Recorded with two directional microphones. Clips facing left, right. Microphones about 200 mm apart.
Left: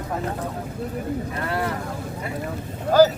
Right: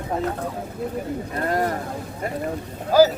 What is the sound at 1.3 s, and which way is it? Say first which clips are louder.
Speech: right 7 dB; 40° right (ahead or behind).